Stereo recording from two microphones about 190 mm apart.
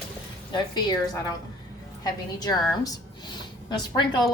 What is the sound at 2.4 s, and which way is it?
A woman's voice, 20° left (ahead or behind).